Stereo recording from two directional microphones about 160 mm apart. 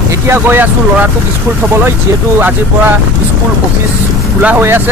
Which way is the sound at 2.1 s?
20° right (ahead or behind).